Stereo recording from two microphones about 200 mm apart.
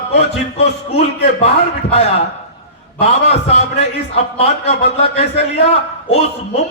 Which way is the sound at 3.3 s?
30° left (ahead or behind).